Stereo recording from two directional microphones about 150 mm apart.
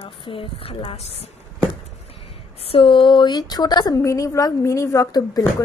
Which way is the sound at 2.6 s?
35° left (ahead or behind).